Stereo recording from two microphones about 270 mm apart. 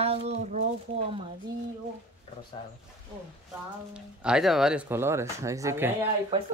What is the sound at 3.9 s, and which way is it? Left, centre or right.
Speech, centre.